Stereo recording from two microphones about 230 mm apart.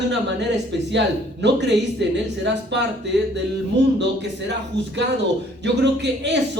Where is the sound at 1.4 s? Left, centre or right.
Right.